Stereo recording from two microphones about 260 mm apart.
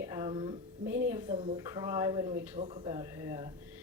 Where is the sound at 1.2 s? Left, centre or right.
Right.